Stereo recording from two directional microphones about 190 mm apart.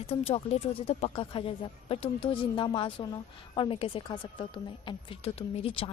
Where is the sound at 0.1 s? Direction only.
30° left (ahead or behind).